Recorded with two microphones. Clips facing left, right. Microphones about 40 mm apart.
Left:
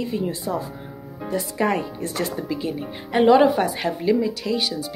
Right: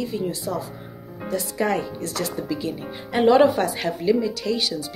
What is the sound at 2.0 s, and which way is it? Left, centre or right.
Speech, left.